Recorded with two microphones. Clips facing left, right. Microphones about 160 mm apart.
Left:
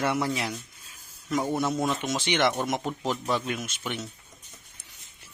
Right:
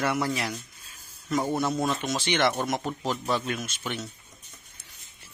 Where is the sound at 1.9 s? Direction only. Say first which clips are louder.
Even; 15° left (ahead or behind).